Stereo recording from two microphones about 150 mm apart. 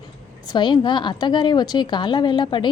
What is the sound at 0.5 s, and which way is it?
A woman's voice, 30° left (ahead or behind).